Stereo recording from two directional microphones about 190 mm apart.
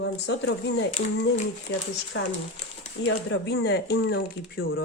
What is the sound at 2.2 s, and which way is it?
Speech, 90° left.